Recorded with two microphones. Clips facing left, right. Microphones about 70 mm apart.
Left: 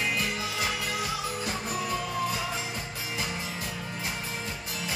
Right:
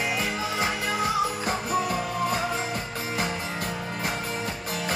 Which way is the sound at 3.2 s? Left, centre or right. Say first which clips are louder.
Right 5 dB; right.